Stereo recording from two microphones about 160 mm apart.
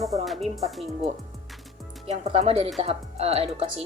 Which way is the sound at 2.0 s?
40° right (ahead or behind).